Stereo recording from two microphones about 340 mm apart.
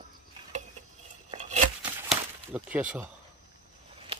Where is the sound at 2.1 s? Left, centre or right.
Centre.